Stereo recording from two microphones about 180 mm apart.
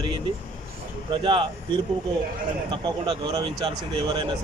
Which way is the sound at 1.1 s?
30° right (ahead or behind).